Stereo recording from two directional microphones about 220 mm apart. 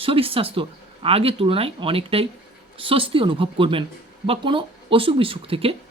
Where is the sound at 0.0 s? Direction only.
25° right (ahead or behind).